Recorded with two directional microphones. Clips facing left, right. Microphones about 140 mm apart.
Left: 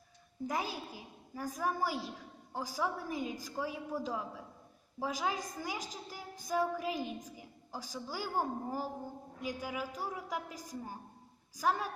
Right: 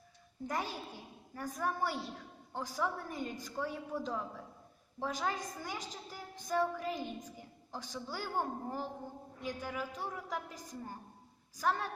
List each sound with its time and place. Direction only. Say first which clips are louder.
0.4 s a child's voice: left 1 dB; 5° left (ahead or behind)